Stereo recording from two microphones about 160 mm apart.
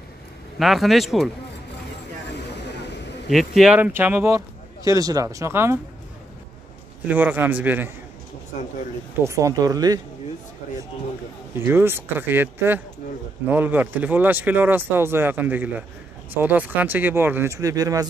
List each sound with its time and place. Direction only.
0.6 s speech: centre (ahead or behind)
3.3 s speech: centre (ahead or behind); by 5.8 s 15° right (ahead or behind)
7.1 s speech: 10° right (ahead or behind)
9.2 s speech: 20° right (ahead or behind)
11.6 s speech: 15° right (ahead or behind)